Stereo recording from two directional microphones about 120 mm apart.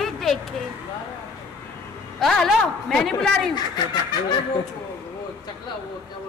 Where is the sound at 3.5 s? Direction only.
35° left (ahead or behind).